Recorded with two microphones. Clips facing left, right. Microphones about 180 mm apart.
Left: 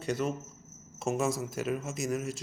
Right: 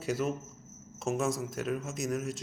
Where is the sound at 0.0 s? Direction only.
5° right (ahead or behind).